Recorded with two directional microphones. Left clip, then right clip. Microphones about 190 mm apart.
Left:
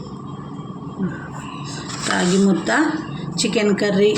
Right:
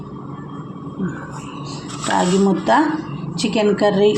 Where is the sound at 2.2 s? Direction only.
20° right (ahead or behind).